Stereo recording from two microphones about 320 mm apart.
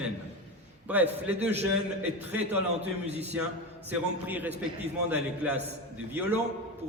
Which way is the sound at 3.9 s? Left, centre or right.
Centre.